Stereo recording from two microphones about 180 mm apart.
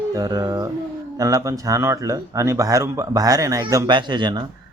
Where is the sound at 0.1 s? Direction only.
20° right (ahead or behind).